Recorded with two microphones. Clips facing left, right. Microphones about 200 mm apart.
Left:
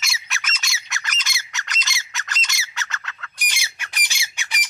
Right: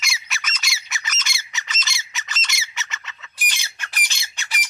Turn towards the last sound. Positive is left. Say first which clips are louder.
# left 1 dB
turn(degrees=10)  # may be behind; listen again after turning